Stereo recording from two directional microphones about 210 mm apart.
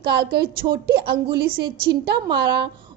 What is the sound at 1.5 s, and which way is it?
Speech, 20° right (ahead or behind).